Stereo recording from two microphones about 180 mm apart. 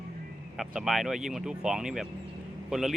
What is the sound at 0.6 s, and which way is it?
Speech, centre (ahead or behind).